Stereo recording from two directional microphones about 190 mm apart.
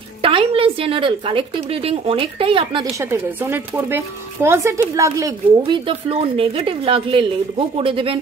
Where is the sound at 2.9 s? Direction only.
10° right (ahead or behind).